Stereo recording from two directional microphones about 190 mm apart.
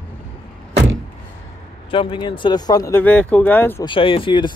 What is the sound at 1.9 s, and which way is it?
Speech, 25° left (ahead or behind).